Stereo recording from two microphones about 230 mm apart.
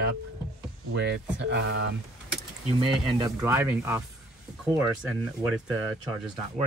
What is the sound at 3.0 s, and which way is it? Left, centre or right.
Speech, centre.